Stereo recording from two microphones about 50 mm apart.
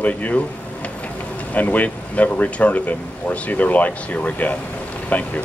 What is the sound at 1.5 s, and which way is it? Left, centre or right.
Speech, left.